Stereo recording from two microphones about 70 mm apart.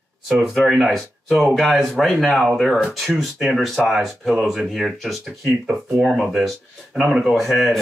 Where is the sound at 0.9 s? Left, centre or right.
Centre.